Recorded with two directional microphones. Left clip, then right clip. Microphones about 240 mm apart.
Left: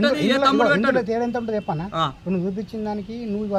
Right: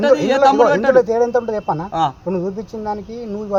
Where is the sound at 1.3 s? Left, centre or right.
Right.